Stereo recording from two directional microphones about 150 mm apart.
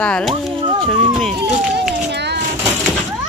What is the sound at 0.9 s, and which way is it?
Speech, 5° left (ahead or behind).